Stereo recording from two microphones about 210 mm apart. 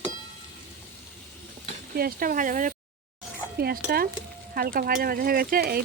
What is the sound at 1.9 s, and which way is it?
Speech, 45° right (ahead or behind).